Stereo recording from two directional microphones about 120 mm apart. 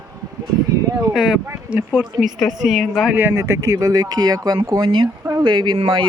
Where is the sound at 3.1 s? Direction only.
20° right (ahead or behind).